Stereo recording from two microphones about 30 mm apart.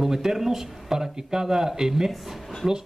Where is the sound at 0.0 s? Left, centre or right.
Centre.